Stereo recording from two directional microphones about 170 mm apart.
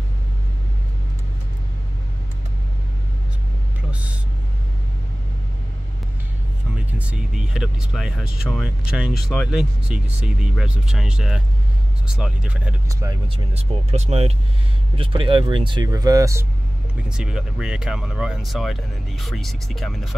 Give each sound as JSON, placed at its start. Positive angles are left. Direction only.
{"t": 3.9, "sound": "vehicle", "side_deg": -10}
{"t": 7.0, "sound": "speech", "side_deg": -5}
{"t": 12.8, "sound": "speech", "side_deg": -20}
{"t": 13.5, "sound": "speech", "side_deg": -35}
{"t": 17.1, "sound": "speech", "side_deg": -5}